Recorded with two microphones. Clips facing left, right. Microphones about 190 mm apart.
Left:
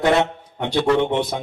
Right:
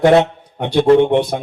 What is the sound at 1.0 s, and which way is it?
Speech, 55° right (ahead or behind).